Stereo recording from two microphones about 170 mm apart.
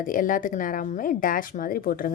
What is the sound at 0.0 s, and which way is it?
A woman's voice, 50° left (ahead or behind).